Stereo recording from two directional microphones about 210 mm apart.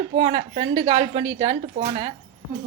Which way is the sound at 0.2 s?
30° right (ahead or behind).